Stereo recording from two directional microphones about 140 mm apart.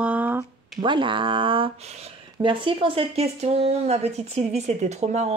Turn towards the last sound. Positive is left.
turn(degrees=-50)  # may be behind; listen again after turning